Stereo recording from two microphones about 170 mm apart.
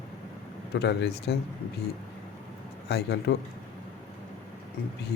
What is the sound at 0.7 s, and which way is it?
Speech, 85° left.